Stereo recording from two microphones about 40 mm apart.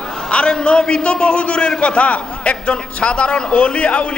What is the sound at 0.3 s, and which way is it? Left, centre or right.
A man's voice, left.